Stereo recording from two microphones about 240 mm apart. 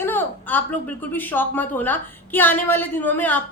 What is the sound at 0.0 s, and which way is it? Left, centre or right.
A woman's voice, centre.